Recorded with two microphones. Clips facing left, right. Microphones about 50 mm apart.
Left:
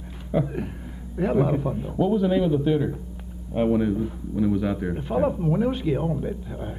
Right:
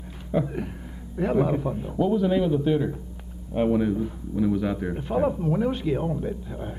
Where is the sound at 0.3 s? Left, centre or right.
Centre.